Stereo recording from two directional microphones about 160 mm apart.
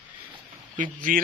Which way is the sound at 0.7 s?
55° right (ahead or behind).